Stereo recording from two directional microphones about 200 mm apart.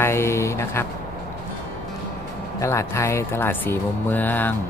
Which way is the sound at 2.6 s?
15° left (ahead or behind).